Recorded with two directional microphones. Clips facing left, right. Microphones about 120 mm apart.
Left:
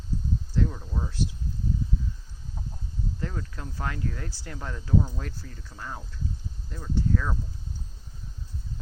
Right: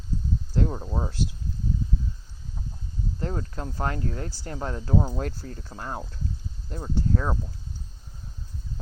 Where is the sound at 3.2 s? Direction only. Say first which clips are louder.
Right 7 dB; 35° right (ahead or behind).